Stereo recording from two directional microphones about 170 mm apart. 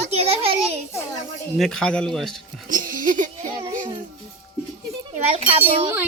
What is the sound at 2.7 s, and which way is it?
Music, 55° right (ahead or behind).